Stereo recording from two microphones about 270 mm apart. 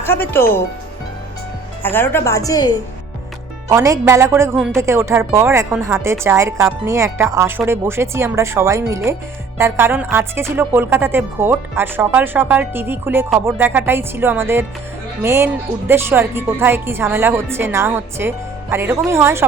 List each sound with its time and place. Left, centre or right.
0.0 s speech: centre
1.8 s speech: centre
3.7 s speech: centre